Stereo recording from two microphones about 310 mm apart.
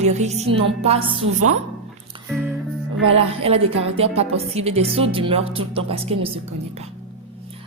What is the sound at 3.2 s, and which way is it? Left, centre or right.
Speech, centre.